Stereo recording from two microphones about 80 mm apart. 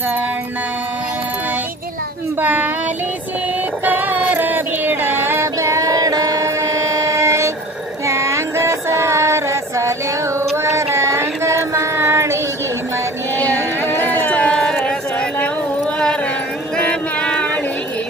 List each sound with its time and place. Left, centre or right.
2.4 s speech: right
3.8 s female singing: right
8.1 s music: right
13.4 s a sound: centre
15.8 s carnatic music: centre
16.7 s a sound: centre